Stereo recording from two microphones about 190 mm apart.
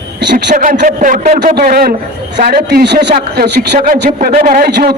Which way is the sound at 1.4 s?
50° right (ahead or behind).